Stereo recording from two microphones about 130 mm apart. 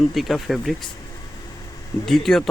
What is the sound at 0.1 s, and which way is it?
Speech, centre (ahead or behind).